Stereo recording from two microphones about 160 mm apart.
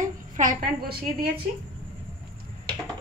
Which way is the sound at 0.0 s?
55° right (ahead or behind).